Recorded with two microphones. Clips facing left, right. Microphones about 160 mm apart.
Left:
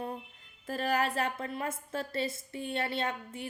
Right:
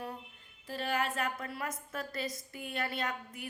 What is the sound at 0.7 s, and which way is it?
A woman's voice, 40° left (ahead or behind).